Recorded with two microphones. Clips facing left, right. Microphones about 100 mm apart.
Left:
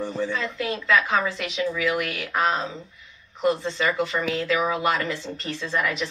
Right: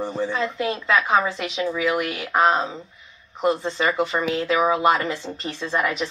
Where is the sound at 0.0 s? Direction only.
25° right (ahead or behind).